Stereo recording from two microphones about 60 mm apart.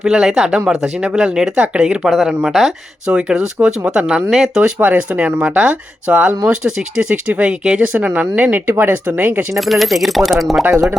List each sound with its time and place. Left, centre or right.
0.0 s speech: centre
2.2 s speech: centre
3.1 s speech: centre
4.8 s speech: right
9.6 s speech: centre
10.6 s speech: right